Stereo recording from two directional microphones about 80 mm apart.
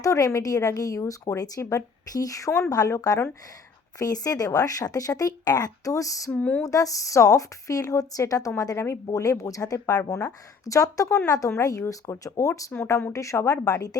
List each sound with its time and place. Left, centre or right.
0.0 s a woman's voice: left
6.3 s speech: centre
6.6 s a woman's voice: left